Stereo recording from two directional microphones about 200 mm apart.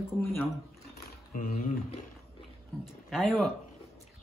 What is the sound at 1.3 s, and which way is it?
Speech, 40° left (ahead or behind).